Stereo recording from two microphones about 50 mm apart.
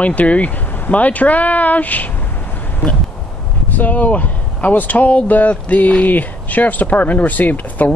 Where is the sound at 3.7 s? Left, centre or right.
Left.